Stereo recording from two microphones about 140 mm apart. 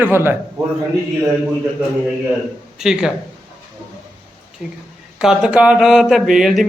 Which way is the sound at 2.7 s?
5° right (ahead or behind).